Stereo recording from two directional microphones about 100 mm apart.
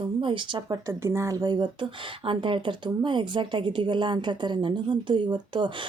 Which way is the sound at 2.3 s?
55° right (ahead or behind).